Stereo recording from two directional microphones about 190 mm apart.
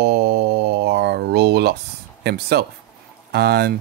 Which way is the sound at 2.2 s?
60° right (ahead or behind).